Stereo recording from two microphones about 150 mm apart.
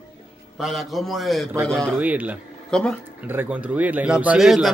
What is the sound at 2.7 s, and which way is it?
Speech, 5° left (ahead or behind).